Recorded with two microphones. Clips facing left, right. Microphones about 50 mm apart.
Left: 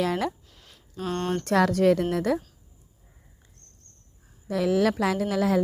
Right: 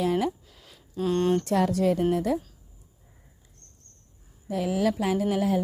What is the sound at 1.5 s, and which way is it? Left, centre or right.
Speech, left.